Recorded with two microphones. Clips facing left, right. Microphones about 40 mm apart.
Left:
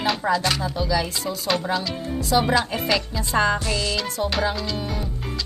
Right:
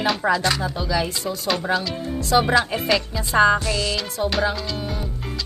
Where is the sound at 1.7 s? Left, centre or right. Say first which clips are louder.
Right 2 dB; centre.